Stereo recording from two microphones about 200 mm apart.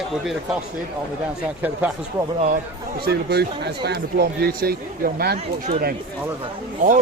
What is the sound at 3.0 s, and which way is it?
Speech, 55° right (ahead or behind).